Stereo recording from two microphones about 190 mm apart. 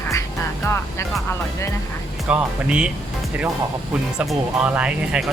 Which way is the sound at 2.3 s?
5° right (ahead or behind).